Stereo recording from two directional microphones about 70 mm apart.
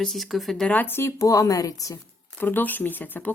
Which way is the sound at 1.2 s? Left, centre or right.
Left.